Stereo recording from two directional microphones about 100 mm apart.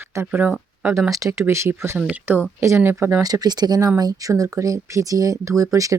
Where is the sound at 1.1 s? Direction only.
30° right (ahead or behind).